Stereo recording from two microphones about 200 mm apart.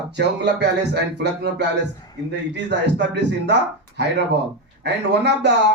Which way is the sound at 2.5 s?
60° right (ahead or behind).